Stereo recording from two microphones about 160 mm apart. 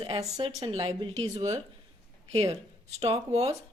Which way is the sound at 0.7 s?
35° right (ahead or behind).